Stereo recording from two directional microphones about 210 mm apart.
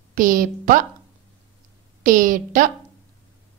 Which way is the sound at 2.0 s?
40° right (ahead or behind).